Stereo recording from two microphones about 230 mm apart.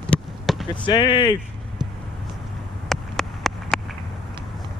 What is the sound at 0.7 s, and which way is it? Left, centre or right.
Speech, centre.